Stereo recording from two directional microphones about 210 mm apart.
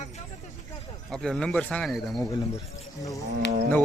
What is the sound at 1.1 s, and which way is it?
Speech, 5° left (ahead or behind).